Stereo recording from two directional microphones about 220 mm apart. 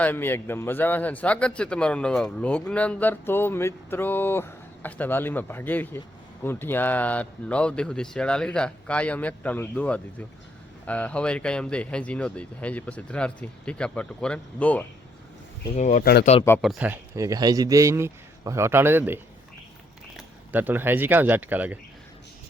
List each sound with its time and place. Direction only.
0.0 s a man's voice: 10° left (ahead or behind)
15.7 s speech: 35° left (ahead or behind)
16.6 s speech: 5° right (ahead or behind)